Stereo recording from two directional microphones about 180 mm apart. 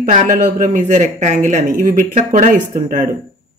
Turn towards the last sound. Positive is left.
turn(degrees=-45)  # may be behind; listen again after turning